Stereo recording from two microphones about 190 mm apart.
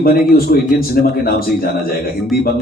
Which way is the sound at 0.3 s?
50° left (ahead or behind).